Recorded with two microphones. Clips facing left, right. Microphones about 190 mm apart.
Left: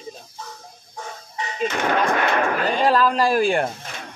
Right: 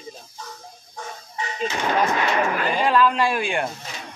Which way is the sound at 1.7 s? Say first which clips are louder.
Left 1 dB; 55° left (ahead or behind).